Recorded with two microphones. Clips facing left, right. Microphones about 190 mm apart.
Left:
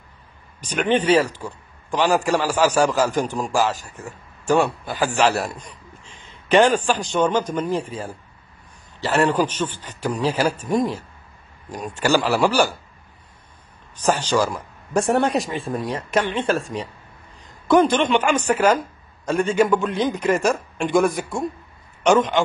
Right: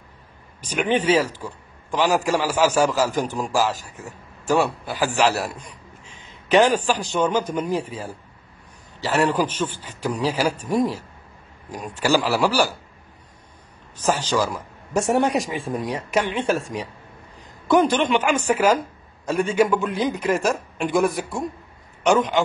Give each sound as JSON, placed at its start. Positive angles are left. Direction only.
{"t": 0.7, "sound": "speech", "side_deg": -5}
{"t": 1.3, "sound": "a sound", "side_deg": 15}
{"t": 2.0, "sound": "speech", "side_deg": -5}
{"t": 3.2, "sound": "a man's voice", "side_deg": 10}
{"t": 3.4, "sound": "a man's voice", "side_deg": 0}
{"t": 6.5, "sound": "speech", "side_deg": -10}
{"t": 9.0, "sound": "a man's voice", "side_deg": 0}
{"t": 15.0, "sound": "a man's voice", "side_deg": -10}